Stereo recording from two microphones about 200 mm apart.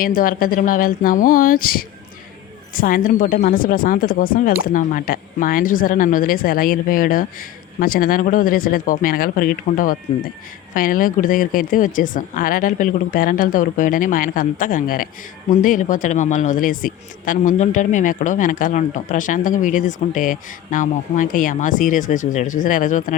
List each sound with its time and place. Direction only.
0.0 s speech: 45° left (ahead or behind)